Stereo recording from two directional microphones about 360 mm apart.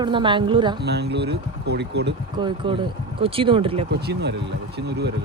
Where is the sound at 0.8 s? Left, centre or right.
Right.